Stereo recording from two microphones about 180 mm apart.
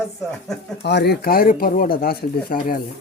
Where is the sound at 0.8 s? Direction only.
70° left (ahead or behind); by 2.8 s 55° left (ahead or behind).